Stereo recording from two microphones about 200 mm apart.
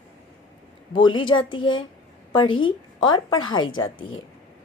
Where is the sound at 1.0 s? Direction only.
20° left (ahead or behind).